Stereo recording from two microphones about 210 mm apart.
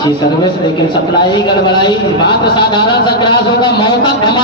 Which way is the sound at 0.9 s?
20° left (ahead or behind).